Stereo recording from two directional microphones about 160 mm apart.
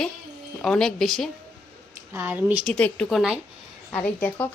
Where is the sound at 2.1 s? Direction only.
15° right (ahead or behind).